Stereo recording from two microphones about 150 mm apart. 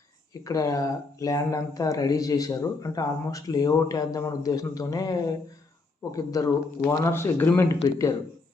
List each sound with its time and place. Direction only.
0.4 s speech: 25° left (ahead or behind)